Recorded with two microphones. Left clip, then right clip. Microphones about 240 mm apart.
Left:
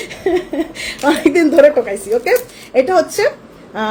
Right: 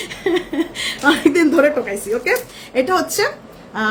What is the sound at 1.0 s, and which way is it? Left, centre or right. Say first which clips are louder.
A woman's voice: left 2 dB; centre.